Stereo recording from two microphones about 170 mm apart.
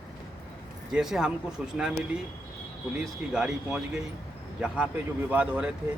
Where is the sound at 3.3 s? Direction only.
5° right (ahead or behind).